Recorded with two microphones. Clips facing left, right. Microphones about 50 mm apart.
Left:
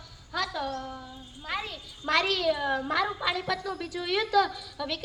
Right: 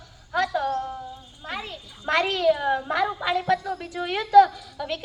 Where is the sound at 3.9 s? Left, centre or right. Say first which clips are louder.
Right 6 dB; right.